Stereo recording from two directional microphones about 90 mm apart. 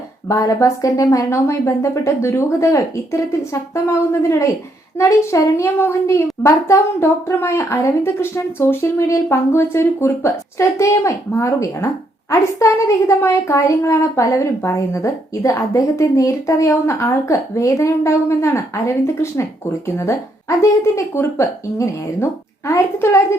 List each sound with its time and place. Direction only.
0.3 s a woman's voice: 35° left (ahead or behind)